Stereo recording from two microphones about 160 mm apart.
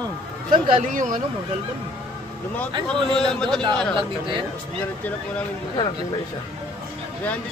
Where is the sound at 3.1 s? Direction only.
5° left (ahead or behind).